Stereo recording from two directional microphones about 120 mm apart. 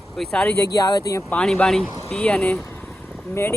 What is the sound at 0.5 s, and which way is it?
Speech, 25° left (ahead or behind).